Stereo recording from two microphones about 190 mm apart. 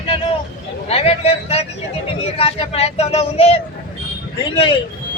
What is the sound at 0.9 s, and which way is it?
Speech, 30° left (ahead or behind).